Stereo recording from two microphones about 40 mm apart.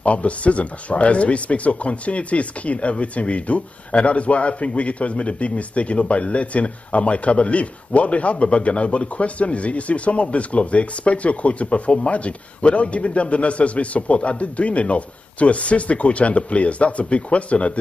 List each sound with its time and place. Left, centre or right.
0.0 s speech: left